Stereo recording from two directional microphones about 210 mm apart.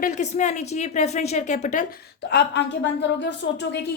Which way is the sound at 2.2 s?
55° left (ahead or behind).